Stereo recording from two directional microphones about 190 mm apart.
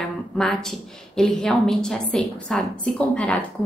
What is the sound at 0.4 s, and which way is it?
A woman's voice, 5° left (ahead or behind).